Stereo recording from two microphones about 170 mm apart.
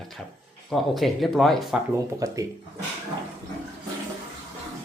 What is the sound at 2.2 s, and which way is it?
Speech, 20° right (ahead or behind).